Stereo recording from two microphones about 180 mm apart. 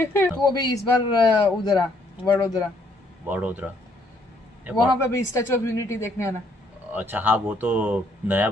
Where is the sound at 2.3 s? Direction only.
20° left (ahead or behind).